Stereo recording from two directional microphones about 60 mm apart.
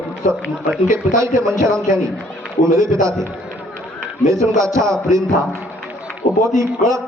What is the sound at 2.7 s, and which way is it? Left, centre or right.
Speech, right.